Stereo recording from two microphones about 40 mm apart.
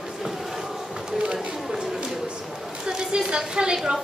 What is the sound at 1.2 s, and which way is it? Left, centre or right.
Chatter, right.